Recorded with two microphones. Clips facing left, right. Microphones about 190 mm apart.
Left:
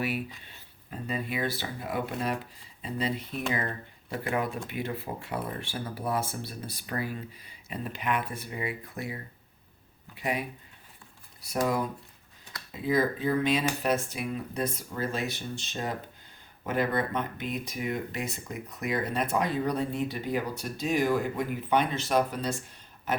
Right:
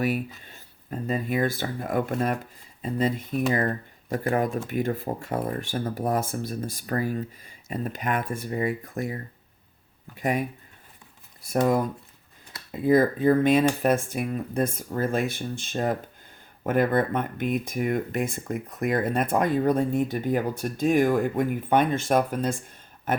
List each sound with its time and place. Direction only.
0.3 s speech: 45° right (ahead or behind)
10.2 s speech: 45° right (ahead or behind)
11.4 s speech: 50° right (ahead or behind)